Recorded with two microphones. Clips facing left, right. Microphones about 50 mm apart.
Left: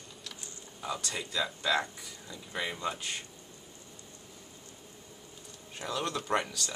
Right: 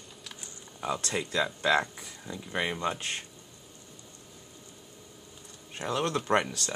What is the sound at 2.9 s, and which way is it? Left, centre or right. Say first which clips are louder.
Speech: right 3 dB; right.